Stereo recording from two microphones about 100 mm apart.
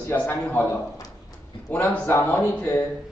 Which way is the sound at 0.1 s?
15° left (ahead or behind).